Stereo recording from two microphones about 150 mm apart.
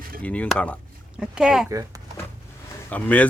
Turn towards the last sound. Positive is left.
turn(degrees=10)  # may be behind; listen again after turning